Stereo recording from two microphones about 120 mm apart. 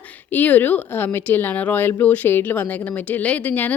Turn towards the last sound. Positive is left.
turn(degrees=15)  # may be behind; listen again after turning